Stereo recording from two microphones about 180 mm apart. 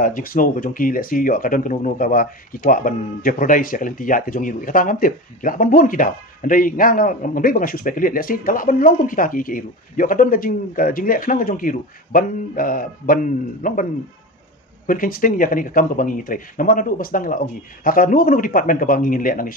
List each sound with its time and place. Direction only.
0.0 s speech: 50° left (ahead or behind)
14.9 s speech: 50° left (ahead or behind)